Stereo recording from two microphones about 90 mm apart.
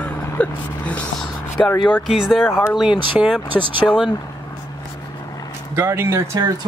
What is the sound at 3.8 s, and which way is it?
Speech, 20° left (ahead or behind).